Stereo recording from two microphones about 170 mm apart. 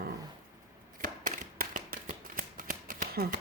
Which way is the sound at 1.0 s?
50° right (ahead or behind).